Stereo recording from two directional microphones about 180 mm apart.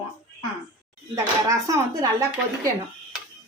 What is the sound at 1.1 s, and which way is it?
Speech, 15° right (ahead or behind).